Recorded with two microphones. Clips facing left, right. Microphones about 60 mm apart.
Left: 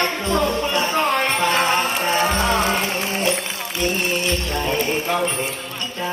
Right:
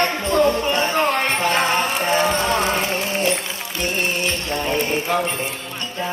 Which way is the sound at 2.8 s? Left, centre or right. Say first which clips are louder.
Right 1 dB; right.